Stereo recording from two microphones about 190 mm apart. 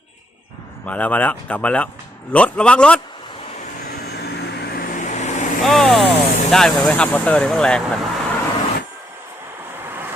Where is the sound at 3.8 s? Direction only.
55° left (ahead or behind); by 5.4 s 40° left (ahead or behind).